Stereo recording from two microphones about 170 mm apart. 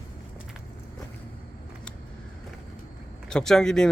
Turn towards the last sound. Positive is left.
turn(degrees=5)  # may be behind; listen again after turning